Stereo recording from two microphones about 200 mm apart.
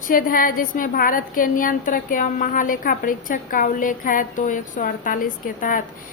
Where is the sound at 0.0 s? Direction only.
45° left (ahead or behind).